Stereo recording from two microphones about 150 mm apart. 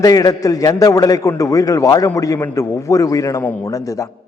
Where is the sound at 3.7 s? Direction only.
20° left (ahead or behind).